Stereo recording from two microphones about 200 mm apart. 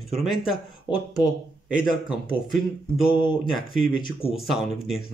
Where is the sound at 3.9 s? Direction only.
30° left (ahead or behind).